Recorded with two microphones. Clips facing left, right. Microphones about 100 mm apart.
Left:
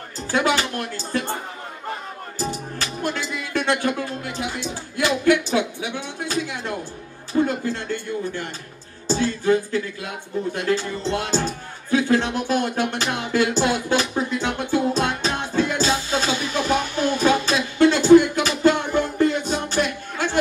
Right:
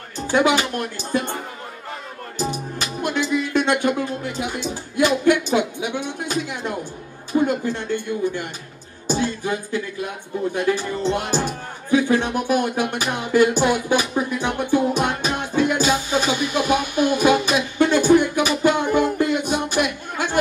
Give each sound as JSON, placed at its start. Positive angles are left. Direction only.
{"t": 0.3, "sound": "speech", "side_deg": -15}
{"t": 2.3, "sound": "speech", "side_deg": -15}
{"t": 9.0, "sound": "music", "side_deg": -15}
{"t": 10.5, "sound": "speech", "side_deg": -15}